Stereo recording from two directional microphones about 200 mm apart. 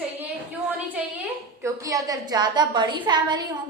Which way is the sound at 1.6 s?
15° right (ahead or behind).